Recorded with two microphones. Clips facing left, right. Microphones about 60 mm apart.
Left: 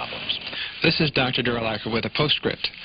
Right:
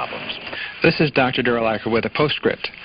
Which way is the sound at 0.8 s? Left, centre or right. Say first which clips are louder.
Right 6 dB; right.